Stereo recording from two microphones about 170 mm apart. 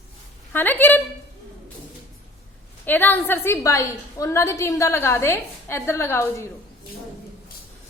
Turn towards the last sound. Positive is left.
turn(degrees=15)  # may be behind; listen again after turning